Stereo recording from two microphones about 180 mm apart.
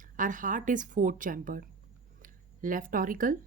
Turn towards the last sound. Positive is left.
turn(degrees=-50)  # may be behind; listen again after turning